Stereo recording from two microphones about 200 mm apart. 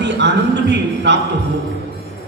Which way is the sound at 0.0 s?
60° right (ahead or behind).